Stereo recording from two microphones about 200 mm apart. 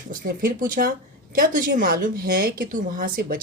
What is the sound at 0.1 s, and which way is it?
A woman's voice, 45° right (ahead or behind).